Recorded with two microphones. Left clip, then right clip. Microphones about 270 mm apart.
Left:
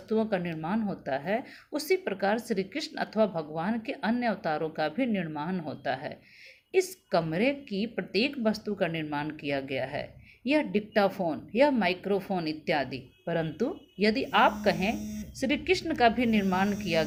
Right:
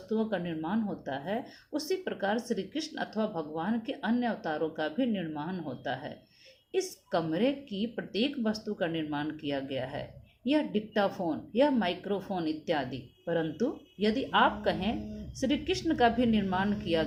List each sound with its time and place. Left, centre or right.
0.1 s a woman's voice: left